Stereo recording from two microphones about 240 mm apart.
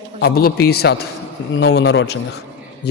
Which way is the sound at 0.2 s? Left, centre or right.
Left.